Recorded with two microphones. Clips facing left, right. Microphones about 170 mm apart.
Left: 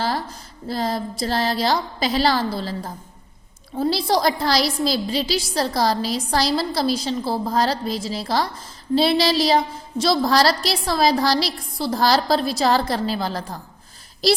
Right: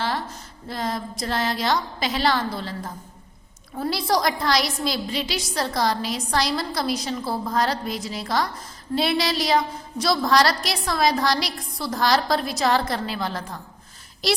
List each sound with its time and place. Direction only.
0.0 s a woman's voice: 35° left (ahead or behind)